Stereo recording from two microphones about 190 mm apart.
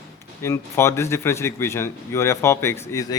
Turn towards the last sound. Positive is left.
turn(degrees=15)  # may be behind; listen again after turning